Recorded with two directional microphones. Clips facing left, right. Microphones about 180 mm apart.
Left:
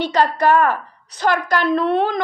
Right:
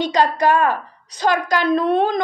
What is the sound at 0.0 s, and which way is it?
A woman's voice, 15° right (ahead or behind).